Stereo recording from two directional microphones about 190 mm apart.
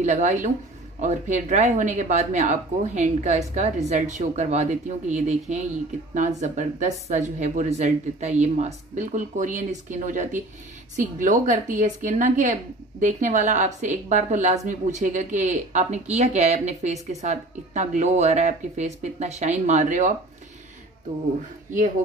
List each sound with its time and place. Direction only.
0.0 s a woman's voice: 40° right (ahead or behind)